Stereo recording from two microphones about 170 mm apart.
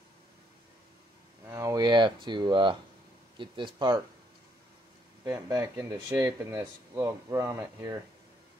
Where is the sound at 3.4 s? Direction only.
30° right (ahead or behind).